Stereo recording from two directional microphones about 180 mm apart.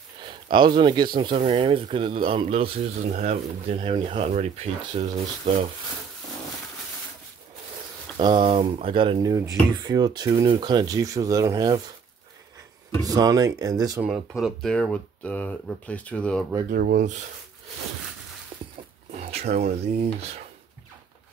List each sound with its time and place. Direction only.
0.2 s speech: 25° right (ahead or behind)
8.2 s speech: 25° right (ahead or behind)
13.0 s speech: 20° right (ahead or behind)
14.0 s speech: centre (ahead or behind)
16.7 s speech: 55° right (ahead or behind)
19.4 s speech: 40° right (ahead or behind)